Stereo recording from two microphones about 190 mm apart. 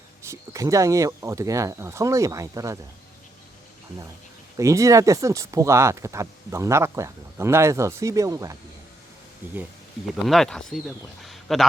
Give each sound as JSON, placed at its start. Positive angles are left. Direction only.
{"t": 0.3, "sound": "speech", "side_deg": -15}
{"t": 4.5, "sound": "speech", "side_deg": -15}
{"t": 10.2, "sound": "speech", "side_deg": 0}